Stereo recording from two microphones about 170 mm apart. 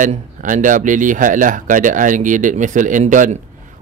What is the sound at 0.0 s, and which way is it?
A man's voice, 50° right (ahead or behind).